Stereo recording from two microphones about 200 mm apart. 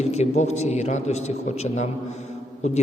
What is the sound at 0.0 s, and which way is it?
A man's voice, 35° left (ahead or behind).